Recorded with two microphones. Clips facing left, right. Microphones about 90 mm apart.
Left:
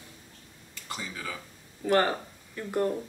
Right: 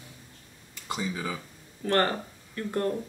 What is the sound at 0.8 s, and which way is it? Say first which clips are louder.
Speech: right 6 dB; 20° right (ahead or behind).